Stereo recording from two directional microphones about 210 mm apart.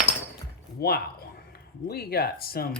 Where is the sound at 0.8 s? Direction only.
50° left (ahead or behind).